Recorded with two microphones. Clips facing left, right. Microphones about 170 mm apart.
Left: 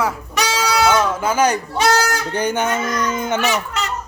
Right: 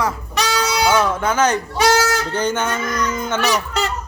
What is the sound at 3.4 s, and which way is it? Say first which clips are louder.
Fowl: right 1 dB; 40° right (ahead or behind).